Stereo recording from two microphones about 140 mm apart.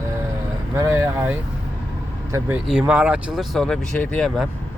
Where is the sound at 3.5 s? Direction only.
5° left (ahead or behind).